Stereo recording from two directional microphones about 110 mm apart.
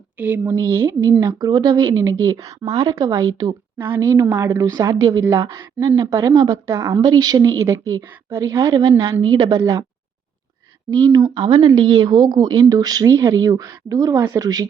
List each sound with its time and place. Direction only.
0.2 s speech: 15° right (ahead or behind)
0.4 s speech: 25° right (ahead or behind)
1.3 s speech: 40° right (ahead or behind)
3.8 s speech: 20° right (ahead or behind)
7.1 s speech: 35° right (ahead or behind)
8.7 s a woman's voice: 45° right (ahead or behind)
10.9 s speech: 40° right (ahead or behind)